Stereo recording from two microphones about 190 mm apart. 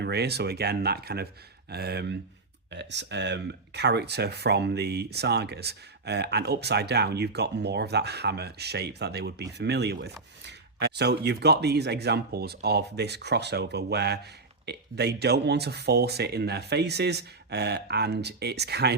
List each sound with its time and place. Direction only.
0.0 s speech: 60° right (ahead or behind)